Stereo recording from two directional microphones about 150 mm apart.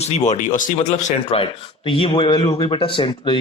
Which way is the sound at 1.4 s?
35° left (ahead or behind).